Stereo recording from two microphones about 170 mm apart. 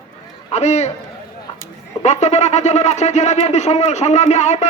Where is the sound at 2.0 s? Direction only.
40° left (ahead or behind).